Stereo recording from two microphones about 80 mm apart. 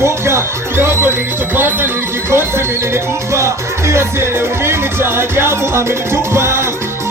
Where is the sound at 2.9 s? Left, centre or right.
Right.